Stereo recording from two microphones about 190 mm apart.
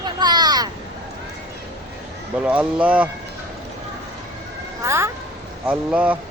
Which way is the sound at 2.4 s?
5° right (ahead or behind).